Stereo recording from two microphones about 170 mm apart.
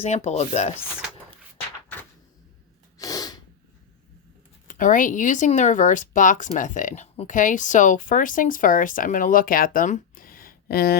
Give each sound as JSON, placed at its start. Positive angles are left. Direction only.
{"t": 0.0, "sound": "chopping", "side_deg": 40}
{"t": 3.0, "sound": "sneeze", "side_deg": 20}
{"t": 4.7, "sound": "speech", "side_deg": 50}